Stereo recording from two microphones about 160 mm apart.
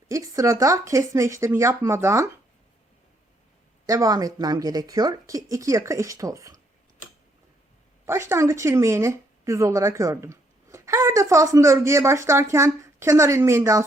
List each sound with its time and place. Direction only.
0.1 s speech: 20° right (ahead or behind)
3.8 s speech: 20° right (ahead or behind)
8.0 s speech: 15° right (ahead or behind)